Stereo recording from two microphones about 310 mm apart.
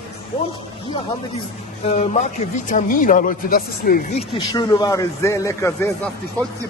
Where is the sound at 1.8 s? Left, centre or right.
Left.